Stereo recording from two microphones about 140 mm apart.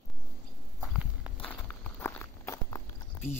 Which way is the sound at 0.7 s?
5° right (ahead or behind).